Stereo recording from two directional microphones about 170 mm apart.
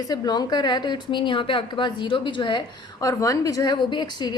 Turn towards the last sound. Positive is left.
turn(degrees=25)  # may be behind; listen again after turning